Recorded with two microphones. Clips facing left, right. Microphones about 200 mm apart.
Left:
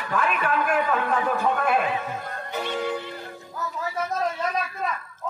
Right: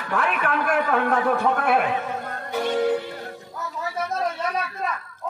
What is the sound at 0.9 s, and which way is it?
Speech, 70° right (ahead or behind).